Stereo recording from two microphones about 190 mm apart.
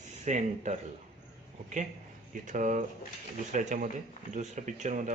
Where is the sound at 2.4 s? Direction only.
40° right (ahead or behind).